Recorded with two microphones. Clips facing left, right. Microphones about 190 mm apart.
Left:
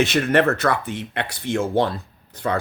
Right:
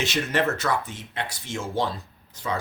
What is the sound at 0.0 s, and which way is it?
Speech, 55° left (ahead or behind).